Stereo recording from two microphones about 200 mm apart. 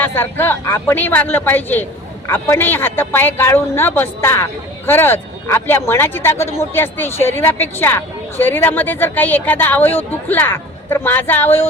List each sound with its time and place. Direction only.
0.0 s a woman's voice: 10° left (ahead or behind)